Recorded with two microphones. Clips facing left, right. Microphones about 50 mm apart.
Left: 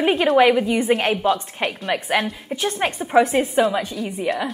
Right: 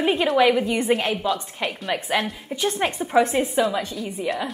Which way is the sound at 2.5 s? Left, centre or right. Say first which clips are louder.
Left 1 dB; left.